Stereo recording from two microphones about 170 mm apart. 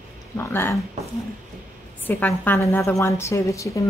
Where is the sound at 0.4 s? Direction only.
15° left (ahead or behind).